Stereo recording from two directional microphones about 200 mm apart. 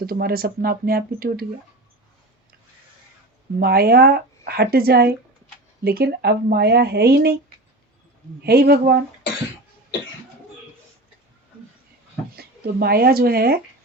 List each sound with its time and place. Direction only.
0.0 s a woman's voice: 50° right (ahead or behind)
3.6 s a woman's voice: 50° right (ahead or behind)
8.4 s a woman's voice: 50° right (ahead or behind)
12.4 s speech: 50° right (ahead or behind)